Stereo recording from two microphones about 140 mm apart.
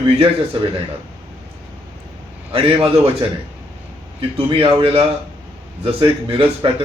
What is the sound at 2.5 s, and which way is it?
Speech, 40° right (ahead or behind).